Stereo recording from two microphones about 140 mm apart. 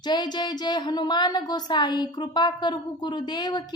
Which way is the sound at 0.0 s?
30° left (ahead or behind).